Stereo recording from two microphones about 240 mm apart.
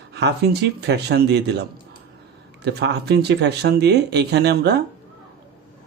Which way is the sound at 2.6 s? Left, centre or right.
Right.